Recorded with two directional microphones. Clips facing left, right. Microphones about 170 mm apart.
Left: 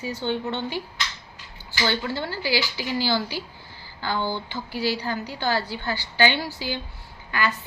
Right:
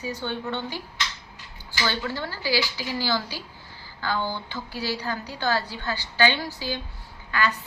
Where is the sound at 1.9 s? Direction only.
15° left (ahead or behind).